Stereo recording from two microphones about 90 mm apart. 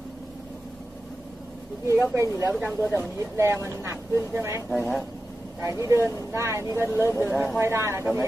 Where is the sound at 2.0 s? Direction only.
25° right (ahead or behind).